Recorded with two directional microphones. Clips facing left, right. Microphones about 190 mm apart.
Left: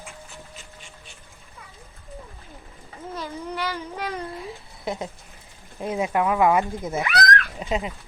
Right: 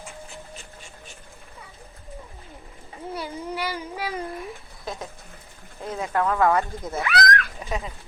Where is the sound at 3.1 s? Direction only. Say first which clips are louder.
Even; 10° right (ahead or behind).